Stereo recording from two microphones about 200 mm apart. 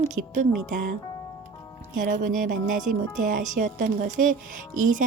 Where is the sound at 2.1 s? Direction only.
40° right (ahead or behind).